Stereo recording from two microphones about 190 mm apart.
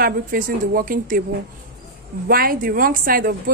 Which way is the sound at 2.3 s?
50° right (ahead or behind).